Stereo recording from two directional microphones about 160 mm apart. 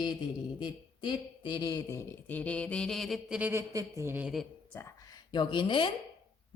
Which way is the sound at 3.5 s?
20° right (ahead or behind).